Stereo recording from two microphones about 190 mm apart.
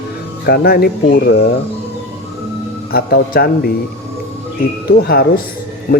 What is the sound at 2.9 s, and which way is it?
Speech, 55° left (ahead or behind).